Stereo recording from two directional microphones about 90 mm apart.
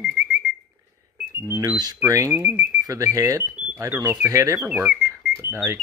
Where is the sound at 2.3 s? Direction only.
20° right (ahead or behind).